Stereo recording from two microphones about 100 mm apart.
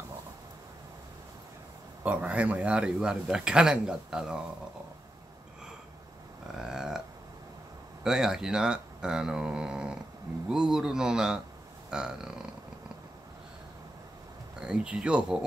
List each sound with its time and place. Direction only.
2.0 s a man's voice: 15° right (ahead or behind)
6.4 s a sound: 5° right (ahead or behind)
8.0 s a man's voice: 5° right (ahead or behind)
14.6 s a man's voice: 10° right (ahead or behind)